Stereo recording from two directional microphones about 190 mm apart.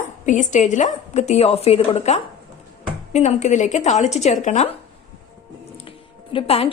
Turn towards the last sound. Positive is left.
turn(degrees=30)  # may be behind; listen again after turning